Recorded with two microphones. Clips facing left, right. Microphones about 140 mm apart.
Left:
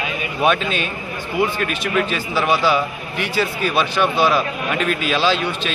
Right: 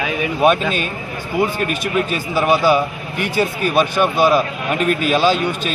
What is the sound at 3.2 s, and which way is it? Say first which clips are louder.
Speech: right 2 dB; 45° right (ahead or behind).